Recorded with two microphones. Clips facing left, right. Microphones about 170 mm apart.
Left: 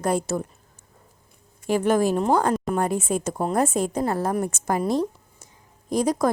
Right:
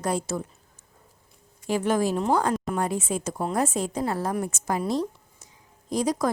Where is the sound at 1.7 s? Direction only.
50° left (ahead or behind).